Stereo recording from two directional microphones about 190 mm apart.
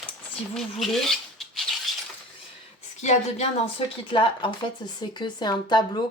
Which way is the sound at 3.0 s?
35° left (ahead or behind).